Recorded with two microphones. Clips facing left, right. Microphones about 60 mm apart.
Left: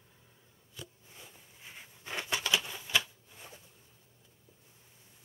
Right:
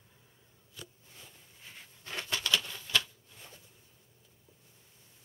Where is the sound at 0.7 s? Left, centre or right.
Centre.